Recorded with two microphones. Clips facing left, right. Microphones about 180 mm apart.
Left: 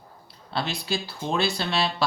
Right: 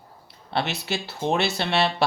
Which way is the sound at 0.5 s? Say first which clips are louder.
Right 2 dB; 65° right (ahead or behind).